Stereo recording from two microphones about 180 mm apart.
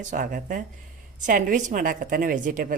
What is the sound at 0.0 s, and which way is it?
A woman's voice, 45° right (ahead or behind).